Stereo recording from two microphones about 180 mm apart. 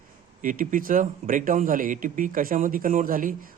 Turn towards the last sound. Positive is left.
turn(degrees=-50)  # may be behind; listen again after turning